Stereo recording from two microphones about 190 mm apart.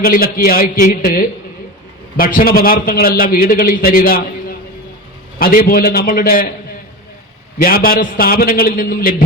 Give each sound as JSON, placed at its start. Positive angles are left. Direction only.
{"t": 0.0, "sound": "a man's voice", "side_deg": 50}
{"t": 7.6, "sound": "a man's voice", "side_deg": 50}